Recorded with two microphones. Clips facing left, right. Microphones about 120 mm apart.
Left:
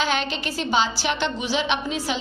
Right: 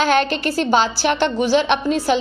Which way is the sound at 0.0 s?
50° right (ahead or behind).